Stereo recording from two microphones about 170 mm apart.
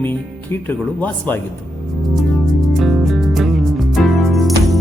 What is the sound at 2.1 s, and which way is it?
Music, centre (ahead or behind).